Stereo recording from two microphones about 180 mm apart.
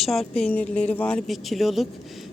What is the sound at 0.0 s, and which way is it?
Speech, centre (ahead or behind).